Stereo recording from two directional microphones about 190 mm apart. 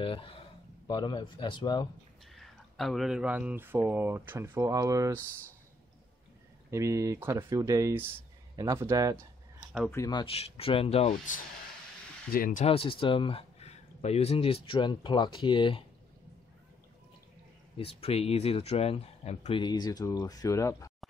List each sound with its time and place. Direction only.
0.0 s speech: 30° left (ahead or behind)
2.3 s speech: centre (ahead or behind); by 5.2 s 15° right (ahead or behind)
6.7 s speech: 15° right (ahead or behind)
9.8 s speech: 15° left (ahead or behind)
17.7 s speech: 30° left (ahead or behind)
19.6 s speech: 20° left (ahead or behind)